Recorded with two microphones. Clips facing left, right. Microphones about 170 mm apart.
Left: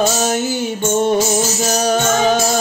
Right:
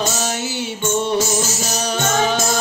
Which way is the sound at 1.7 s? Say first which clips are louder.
Left 5 dB; 45° left (ahead or behind).